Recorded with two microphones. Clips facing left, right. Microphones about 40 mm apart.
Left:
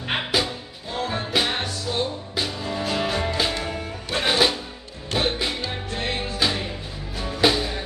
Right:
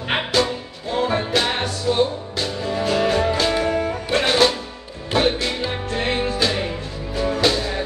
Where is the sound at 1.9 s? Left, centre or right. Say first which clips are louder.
Right 8 dB; centre.